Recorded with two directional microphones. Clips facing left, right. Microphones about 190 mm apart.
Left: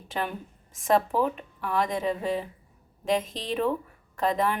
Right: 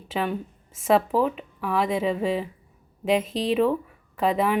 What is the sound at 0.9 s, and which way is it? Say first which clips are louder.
A woman's voice: right 3 dB; 5° right (ahead or behind).